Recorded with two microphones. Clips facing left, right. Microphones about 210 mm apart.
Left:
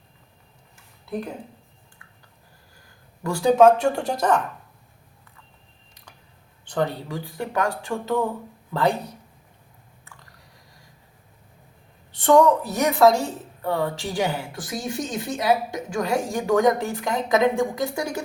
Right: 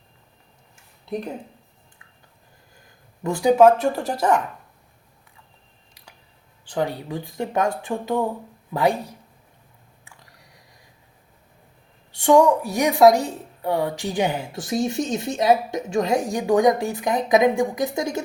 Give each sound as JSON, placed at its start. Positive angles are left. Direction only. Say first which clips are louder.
{"t": 3.2, "sound": "speech", "louder": "right 1 dB", "side_deg": -20}
{"t": 3.6, "sound": "a woman's voice", "louder": "even", "side_deg": -5}
{"t": 6.7, "sound": "a woman's voice", "louder": "even", "side_deg": -10}
{"t": 12.1, "sound": "a woman's voice", "louder": "right 1 dB", "side_deg": -10}